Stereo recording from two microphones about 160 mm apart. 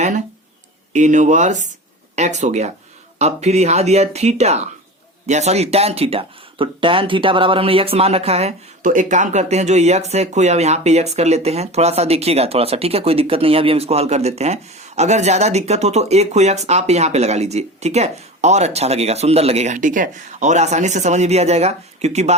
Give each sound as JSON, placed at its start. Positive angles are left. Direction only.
{"t": 0.9, "sound": "speech", "side_deg": -50}